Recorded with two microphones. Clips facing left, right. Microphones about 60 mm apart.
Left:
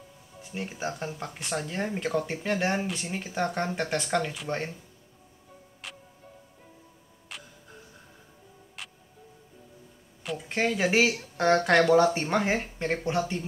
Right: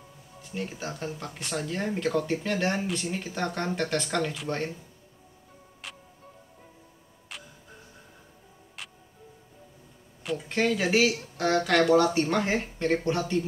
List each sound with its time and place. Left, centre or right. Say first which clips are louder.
0.4 s speech: even; centre
5.8 s music: even; centre
7.3 s a sound: even; centre
8.8 s music: even; centre
10.5 s speech: even; centre; by 11.7 s left
11.7 s speech: even; centre
12.0 s speech: left 1 dB; left